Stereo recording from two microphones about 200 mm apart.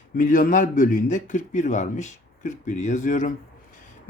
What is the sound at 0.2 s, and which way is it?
A man's voice, 40° left (ahead or behind).